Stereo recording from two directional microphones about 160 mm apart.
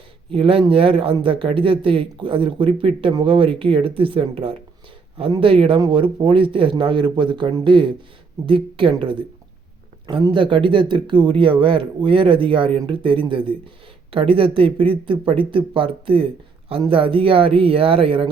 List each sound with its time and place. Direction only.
0.3 s speech: 35° right (ahead or behind)